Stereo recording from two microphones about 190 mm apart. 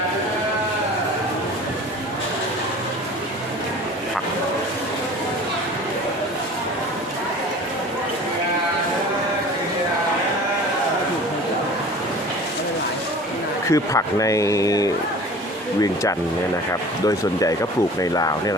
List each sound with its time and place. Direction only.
13.7 s a man's voice: 15° left (ahead or behind)
18.0 s speech: 20° left (ahead or behind)